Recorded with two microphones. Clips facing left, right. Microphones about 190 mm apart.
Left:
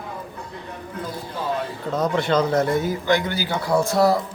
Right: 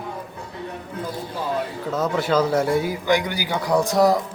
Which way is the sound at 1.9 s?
5° right (ahead or behind).